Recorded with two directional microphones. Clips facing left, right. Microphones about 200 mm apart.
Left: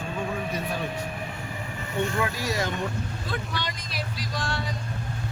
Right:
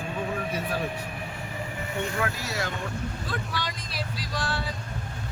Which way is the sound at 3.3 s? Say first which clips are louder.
Left 2 dB; centre (ahead or behind).